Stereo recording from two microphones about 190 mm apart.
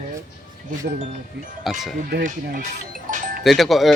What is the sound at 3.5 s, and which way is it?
Speech, centre (ahead or behind).